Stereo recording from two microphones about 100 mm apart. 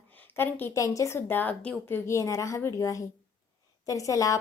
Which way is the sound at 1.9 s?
30° left (ahead or behind).